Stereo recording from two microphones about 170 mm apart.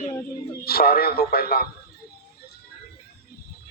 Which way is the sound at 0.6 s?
65° left (ahead or behind).